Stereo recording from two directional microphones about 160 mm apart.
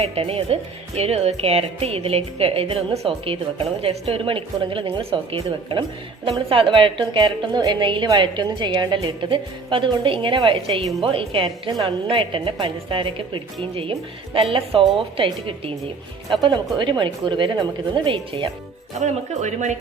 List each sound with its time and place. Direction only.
0.0 s a woman's voice: 40° right (ahead or behind)
16.7 s a woman's voice: 30° right (ahead or behind)
18.9 s speech: 50° right (ahead or behind)